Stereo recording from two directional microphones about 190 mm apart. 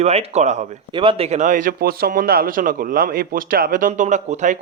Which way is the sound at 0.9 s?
25° right (ahead or behind).